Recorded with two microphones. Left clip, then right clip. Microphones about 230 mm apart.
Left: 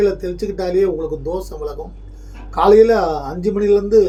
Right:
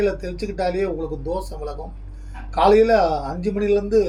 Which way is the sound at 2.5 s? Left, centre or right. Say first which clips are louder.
Left 4 dB; centre.